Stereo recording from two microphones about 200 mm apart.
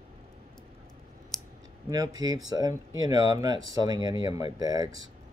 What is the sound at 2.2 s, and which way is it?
Speech, 20° right (ahead or behind).